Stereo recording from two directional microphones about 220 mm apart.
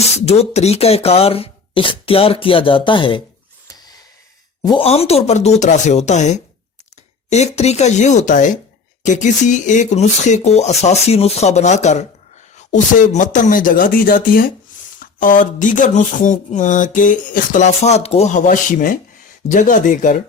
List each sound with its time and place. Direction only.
0.3 s speech: 30° left (ahead or behind)
4.6 s speech: 25° left (ahead or behind)